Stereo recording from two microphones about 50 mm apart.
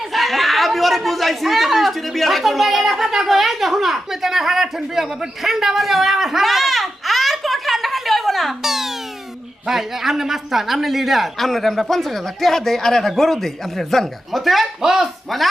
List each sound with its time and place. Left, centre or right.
0.0 s speech: centre